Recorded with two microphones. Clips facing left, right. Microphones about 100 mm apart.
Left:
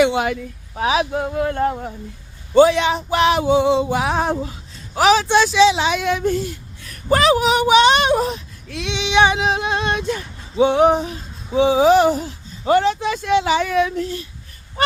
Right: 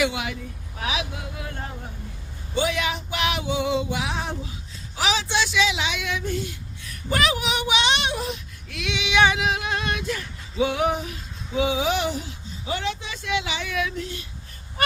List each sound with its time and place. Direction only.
0.0 s speech: 30° left (ahead or behind)
0.8 s speech: 40° left (ahead or behind)
1.5 s speech: 80° left
2.6 s speech: 30° left (ahead or behind); by 5.5 s 50° left (ahead or behind)
5.5 s speech: 30° left (ahead or behind)